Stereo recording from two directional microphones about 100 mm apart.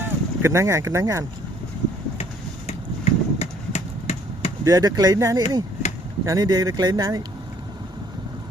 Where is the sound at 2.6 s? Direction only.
90° left.